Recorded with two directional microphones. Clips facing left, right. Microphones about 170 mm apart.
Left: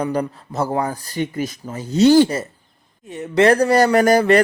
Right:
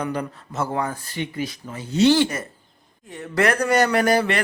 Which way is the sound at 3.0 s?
20° left (ahead or behind).